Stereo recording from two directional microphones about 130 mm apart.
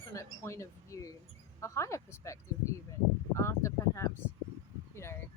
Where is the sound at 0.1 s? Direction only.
20° left (ahead or behind).